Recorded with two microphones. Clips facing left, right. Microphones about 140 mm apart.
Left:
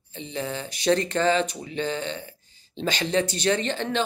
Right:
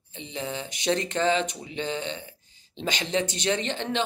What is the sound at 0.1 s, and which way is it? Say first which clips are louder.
Speech: left 2 dB; 20° right (ahead or behind).